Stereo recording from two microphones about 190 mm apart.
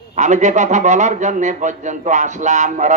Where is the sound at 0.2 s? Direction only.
40° right (ahead or behind).